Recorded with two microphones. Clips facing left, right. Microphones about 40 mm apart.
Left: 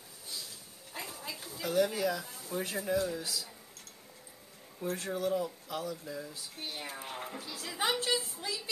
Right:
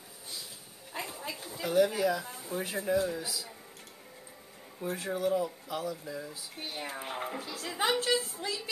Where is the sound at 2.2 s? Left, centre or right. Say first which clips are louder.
Right 4 dB; right.